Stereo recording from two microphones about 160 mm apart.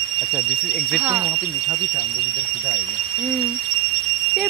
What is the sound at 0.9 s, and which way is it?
Speech, 10° right (ahead or behind).